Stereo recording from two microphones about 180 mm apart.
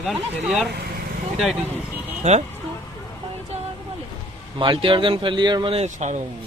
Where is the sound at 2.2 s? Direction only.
40° right (ahead or behind).